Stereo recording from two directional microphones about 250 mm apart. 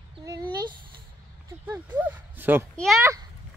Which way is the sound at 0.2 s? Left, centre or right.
Centre.